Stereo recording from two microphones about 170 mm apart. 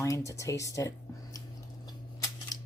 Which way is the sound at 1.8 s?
20° left (ahead or behind).